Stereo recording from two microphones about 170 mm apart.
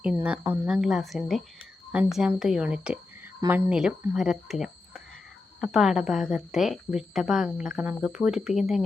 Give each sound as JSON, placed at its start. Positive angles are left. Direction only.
{"t": 0.0, "sound": "a woman's voice", "side_deg": -5}
{"t": 3.7, "sound": "a woman's voice", "side_deg": -5}